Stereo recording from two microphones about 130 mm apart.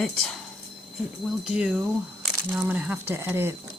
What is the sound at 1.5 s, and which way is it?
Speech, 10° right (ahead or behind).